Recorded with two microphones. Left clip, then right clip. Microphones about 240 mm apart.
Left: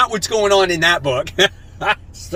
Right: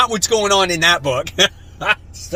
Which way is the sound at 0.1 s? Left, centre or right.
Centre.